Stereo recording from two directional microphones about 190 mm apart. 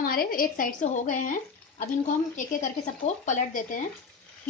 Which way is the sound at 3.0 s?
40° left (ahead or behind).